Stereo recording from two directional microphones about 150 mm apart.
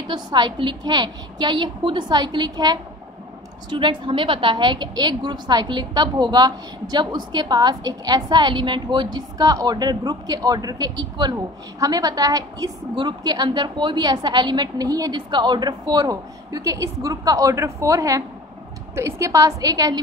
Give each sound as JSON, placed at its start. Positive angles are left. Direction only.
{"t": 0.1, "sound": "a woman's voice", "side_deg": -30}